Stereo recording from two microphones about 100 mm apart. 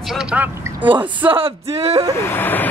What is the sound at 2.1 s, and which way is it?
Vehicle, 25° left (ahead or behind).